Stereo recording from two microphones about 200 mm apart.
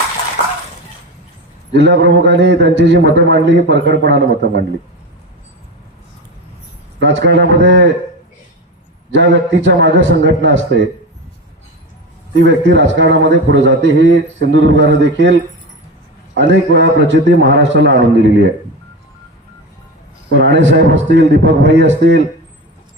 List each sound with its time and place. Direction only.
1.7 s a man's voice: 60° right (ahead or behind)
7.0 s a man's voice: 65° right (ahead or behind)
9.1 s a man's voice: 65° right (ahead or behind)
12.3 s a man's voice: 65° right (ahead or behind)
20.3 s a man's voice: 65° right (ahead or behind)